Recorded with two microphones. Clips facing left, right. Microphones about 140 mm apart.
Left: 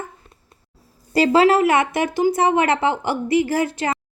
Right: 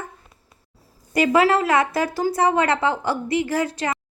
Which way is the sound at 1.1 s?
30° left (ahead or behind).